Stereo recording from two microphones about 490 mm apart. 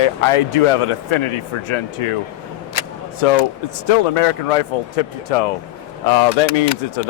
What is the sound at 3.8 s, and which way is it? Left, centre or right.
Speech, left.